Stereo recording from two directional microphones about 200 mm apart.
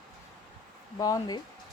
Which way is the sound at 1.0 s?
20° left (ahead or behind).